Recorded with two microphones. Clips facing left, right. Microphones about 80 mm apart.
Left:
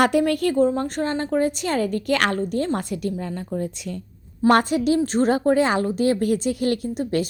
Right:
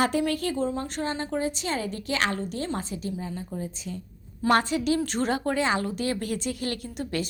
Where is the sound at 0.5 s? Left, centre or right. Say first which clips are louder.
Left 8 dB; left.